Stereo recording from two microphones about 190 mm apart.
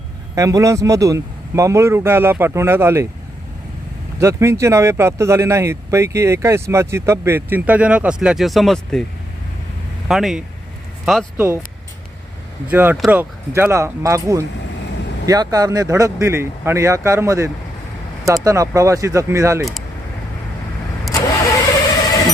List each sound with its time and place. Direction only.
0.3 s speech: 15° right (ahead or behind)
4.2 s speech: 15° right (ahead or behind); by 9.0 s centre (ahead or behind)
10.1 s speech: centre (ahead or behind)
11.3 s speech: 15° right (ahead or behind)
12.6 s speech: 10° right (ahead or behind)
21.1 s vehicle: 15° left (ahead or behind)